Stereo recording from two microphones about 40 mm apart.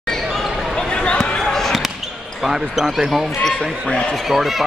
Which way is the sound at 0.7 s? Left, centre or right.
Left.